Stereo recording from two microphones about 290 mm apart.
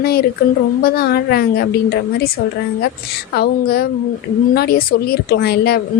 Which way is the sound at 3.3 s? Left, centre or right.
Left.